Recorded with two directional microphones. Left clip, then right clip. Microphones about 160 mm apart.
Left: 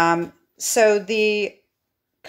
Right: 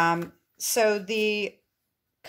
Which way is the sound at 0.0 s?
25° right (ahead or behind).